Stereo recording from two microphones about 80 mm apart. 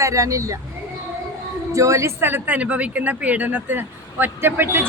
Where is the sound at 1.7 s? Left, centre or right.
Right.